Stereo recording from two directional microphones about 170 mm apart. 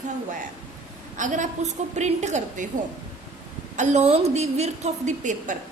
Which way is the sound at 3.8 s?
45° right (ahead or behind).